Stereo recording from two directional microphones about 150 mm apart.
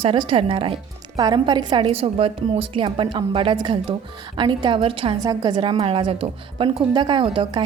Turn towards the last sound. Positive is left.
turn(degrees=-30)  # may be behind; listen again after turning